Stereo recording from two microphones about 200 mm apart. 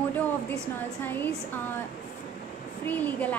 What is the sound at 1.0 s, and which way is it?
Speech, 10° left (ahead or behind).